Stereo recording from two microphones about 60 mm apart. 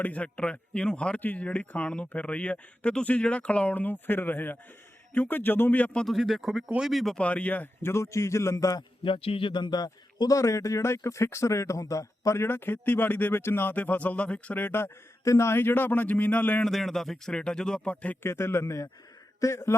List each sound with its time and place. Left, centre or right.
0.0 s speech: left
6.1 s speech: centre
7.2 s a man's voice: left
8.5 s a man's voice: left
10.2 s speech: left
12.4 s speech: left
13.7 s speech: left
15.2 s speech: left
15.5 s speech: left
16.6 s speech: centre
17.8 s speech: left
18.2 s a man's voice: left